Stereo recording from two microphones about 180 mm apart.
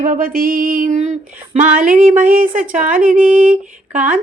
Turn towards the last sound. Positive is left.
turn(degrees=-45)  # may be behind; listen again after turning